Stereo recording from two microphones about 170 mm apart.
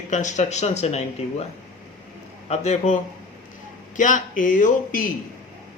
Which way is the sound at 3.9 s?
50° left (ahead or behind).